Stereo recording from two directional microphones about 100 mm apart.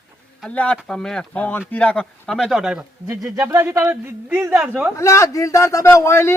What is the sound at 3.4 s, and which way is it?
A man's voice, 25° right (ahead or behind).